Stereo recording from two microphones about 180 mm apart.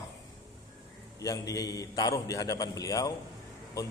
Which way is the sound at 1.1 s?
20° left (ahead or behind).